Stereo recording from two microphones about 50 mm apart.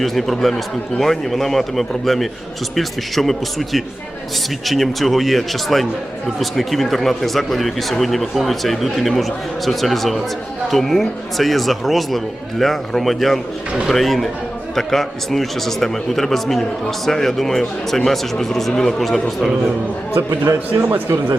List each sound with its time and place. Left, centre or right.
0.0 s speech: centre
20.4 s a man's voice: right
20.9 s speech: right